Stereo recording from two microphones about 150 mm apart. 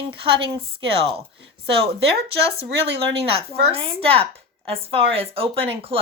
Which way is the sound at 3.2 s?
40° right (ahead or behind).